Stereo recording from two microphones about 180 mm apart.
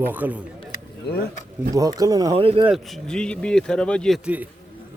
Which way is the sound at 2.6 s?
Centre (ahead or behind).